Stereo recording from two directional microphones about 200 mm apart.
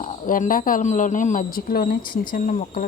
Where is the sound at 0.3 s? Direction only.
40° left (ahead or behind).